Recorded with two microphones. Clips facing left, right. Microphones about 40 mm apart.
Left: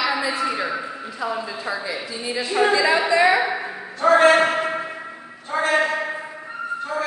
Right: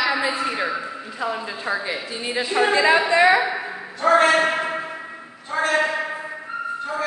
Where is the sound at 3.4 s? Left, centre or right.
Centre.